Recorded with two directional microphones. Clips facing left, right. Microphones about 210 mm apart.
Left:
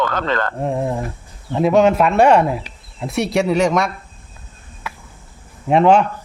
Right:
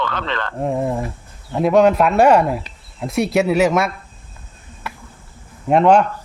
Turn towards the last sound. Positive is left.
turn(degrees=0)  # may be behind; listen again after turning